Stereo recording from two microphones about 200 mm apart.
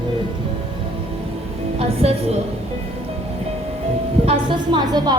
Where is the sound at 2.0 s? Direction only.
30° right (ahead or behind).